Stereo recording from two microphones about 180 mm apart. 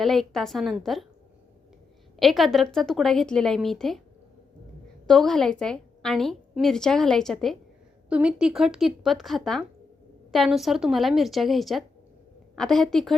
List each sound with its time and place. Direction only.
0.0 s a woman's voice: centre (ahead or behind)
2.1 s a woman's voice: centre (ahead or behind)
5.0 s a woman's voice: centre (ahead or behind)